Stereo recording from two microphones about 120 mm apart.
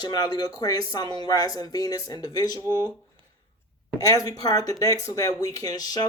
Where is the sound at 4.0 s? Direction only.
30° left (ahead or behind).